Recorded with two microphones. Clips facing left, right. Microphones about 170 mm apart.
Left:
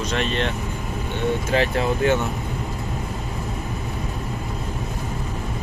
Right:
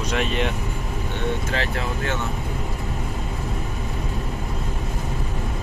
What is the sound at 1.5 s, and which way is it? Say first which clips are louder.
Speech: left 6 dB; 15° left (ahead or behind).